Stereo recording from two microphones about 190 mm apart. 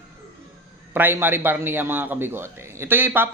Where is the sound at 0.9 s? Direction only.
10° right (ahead or behind).